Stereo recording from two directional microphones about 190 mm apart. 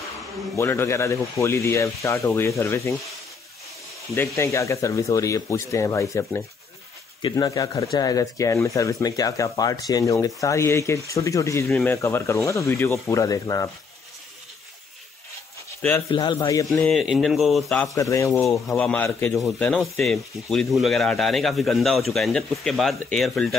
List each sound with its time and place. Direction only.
0.6 s speech: 15° left (ahead or behind)
4.1 s speech: 15° left (ahead or behind)
16.1 s speech: 25° left (ahead or behind)
16.9 s speech: centre (ahead or behind)
17.9 s speech: 15° left (ahead or behind)